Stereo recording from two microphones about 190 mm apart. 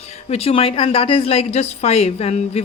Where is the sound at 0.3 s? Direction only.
30° left (ahead or behind).